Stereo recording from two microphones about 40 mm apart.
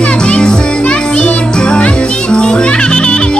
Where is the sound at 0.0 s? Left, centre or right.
Left.